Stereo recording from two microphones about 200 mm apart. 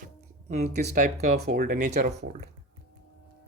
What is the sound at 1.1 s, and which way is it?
Speech, 55° right (ahead or behind).